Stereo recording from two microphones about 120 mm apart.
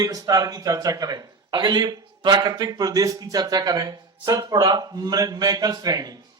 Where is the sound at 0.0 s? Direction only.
30° right (ahead or behind).